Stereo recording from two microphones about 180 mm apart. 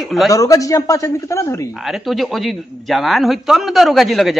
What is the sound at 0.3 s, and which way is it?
Speech, 20° left (ahead or behind).